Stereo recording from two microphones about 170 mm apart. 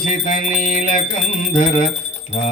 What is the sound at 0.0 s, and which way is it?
Music, 50° left (ahead or behind).